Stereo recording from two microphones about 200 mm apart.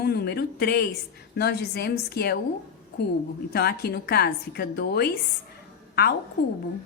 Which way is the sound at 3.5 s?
50° left (ahead or behind).